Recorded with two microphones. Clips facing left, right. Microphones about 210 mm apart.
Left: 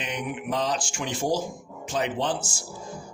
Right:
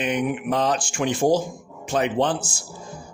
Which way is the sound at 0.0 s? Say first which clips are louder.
Right 8 dB; 55° right (ahead or behind).